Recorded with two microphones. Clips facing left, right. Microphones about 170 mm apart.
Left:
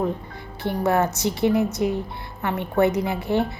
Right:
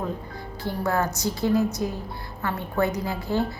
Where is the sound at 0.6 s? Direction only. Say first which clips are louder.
Left 4 dB; 20° left (ahead or behind).